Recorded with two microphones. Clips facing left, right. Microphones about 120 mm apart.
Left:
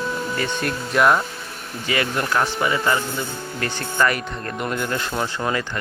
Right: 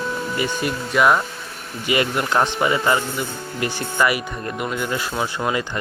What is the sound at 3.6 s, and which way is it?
Speech, 10° right (ahead or behind).